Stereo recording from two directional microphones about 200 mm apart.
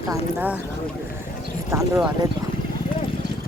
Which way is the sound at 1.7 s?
15° right (ahead or behind).